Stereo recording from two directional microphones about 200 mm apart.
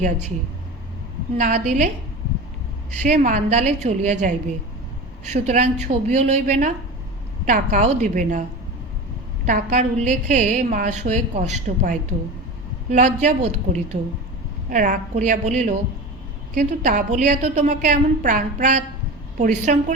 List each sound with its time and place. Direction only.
1.4 s a woman's voice: 35° right (ahead or behind)
3.0 s a woman's voice: 40° right (ahead or behind)
9.5 s a woman's voice: 40° right (ahead or behind)